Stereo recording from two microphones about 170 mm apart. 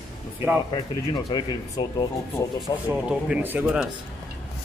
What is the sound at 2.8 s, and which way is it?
Speech, 5° right (ahead or behind).